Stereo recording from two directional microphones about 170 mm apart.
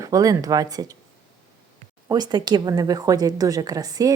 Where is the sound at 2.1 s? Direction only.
25° right (ahead or behind).